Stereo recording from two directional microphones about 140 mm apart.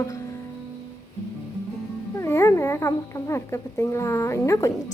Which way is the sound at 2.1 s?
20° left (ahead or behind).